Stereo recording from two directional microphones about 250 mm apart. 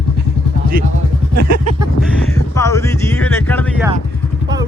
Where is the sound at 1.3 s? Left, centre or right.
Right.